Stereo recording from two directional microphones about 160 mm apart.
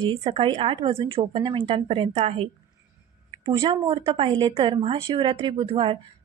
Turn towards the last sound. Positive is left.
turn(degrees=-35)  # may be behind; listen again after turning